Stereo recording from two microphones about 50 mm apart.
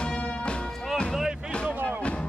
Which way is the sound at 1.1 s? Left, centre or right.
Centre.